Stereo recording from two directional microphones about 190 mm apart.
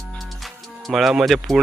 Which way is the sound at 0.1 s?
Centre (ahead or behind).